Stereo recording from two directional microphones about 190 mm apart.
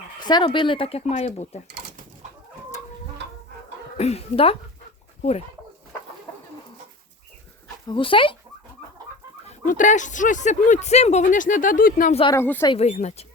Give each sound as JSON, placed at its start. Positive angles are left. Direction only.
{"t": 0.2, "sound": "speech", "side_deg": 20}
{"t": 3.9, "sound": "speech", "side_deg": 35}
{"t": 7.9, "sound": "speech", "side_deg": 25}
{"t": 9.5, "sound": "speech", "side_deg": 40}
{"t": 12.3, "sound": "speech", "side_deg": 10}
{"t": 12.7, "sound": "speech", "side_deg": 35}